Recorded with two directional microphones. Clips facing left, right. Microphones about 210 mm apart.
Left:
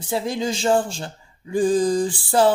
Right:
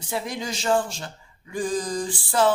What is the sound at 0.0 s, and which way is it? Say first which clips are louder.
Speech: left 6 dB; 30° left (ahead or behind).